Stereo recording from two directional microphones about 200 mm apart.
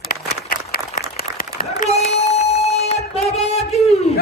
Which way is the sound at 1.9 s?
35° left (ahead or behind).